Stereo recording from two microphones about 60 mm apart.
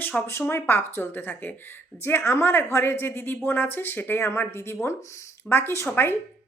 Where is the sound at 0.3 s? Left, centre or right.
Left.